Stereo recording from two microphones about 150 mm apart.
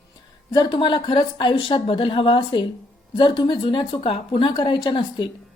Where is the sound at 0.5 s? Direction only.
30° left (ahead or behind).